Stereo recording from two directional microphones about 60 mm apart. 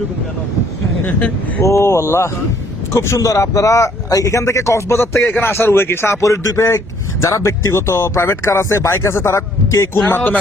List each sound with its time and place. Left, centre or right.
1.0 s speech: left
1.6 s speech: left
10.1 s speech: left